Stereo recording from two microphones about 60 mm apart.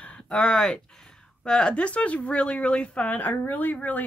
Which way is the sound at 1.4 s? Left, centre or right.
Centre.